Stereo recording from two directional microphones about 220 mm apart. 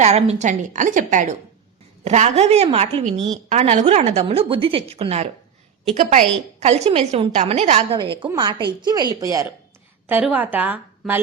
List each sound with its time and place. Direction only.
0.0 s a woman's voice: 30° right (ahead or behind); by 11.2 s 10° right (ahead or behind)